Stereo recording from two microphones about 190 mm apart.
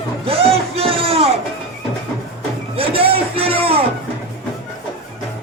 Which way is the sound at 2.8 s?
30° right (ahead or behind).